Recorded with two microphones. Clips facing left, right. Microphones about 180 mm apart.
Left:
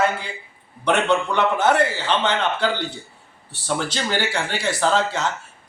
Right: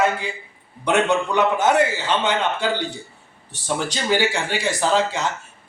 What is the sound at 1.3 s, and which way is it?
A man's voice, 15° right (ahead or behind).